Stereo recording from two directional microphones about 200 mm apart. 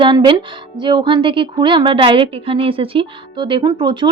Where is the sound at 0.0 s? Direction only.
25° right (ahead or behind).